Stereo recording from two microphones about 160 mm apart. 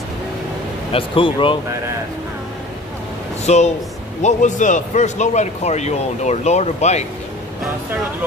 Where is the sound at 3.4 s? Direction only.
45° left (ahead or behind).